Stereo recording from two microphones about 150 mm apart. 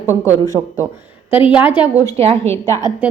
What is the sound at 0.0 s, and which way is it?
A woman's voice, 15° right (ahead or behind).